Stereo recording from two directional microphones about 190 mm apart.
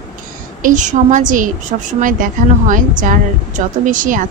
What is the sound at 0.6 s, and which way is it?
Speech, 40° right (ahead or behind).